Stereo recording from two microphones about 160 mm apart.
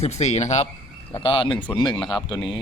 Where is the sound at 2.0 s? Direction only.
Centre (ahead or behind).